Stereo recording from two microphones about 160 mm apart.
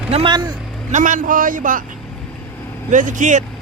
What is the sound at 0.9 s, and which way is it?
Speech, 50° right (ahead or behind).